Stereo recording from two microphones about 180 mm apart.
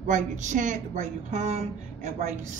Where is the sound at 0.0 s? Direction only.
40° right (ahead or behind).